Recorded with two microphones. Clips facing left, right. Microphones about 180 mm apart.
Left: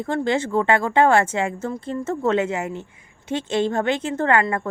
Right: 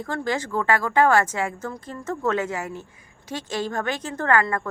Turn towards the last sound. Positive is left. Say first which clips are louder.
# left 2 dB
turn(degrees=25)  # may be behind; listen again after turning